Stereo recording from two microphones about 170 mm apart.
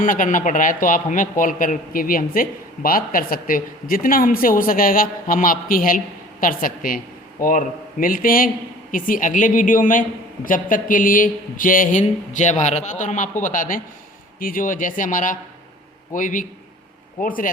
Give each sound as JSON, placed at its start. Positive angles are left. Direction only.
{"t": 0.0, "sound": "speech", "side_deg": 50}